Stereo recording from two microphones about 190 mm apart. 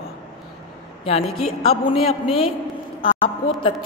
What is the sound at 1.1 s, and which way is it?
A woman's voice, 35° left (ahead or behind).